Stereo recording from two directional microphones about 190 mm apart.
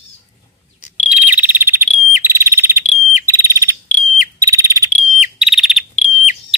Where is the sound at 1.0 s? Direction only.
10° right (ahead or behind).